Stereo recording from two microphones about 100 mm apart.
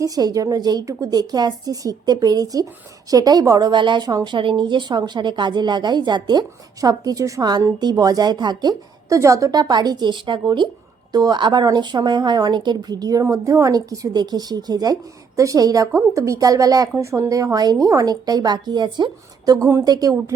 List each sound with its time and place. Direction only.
0.0 s a woman's voice: 40° right (ahead or behind)
9.0 s a woman's voice: 30° right (ahead or behind)